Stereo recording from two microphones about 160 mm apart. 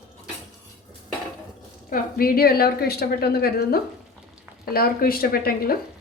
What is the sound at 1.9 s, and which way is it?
A woman's voice, 65° left (ahead or behind).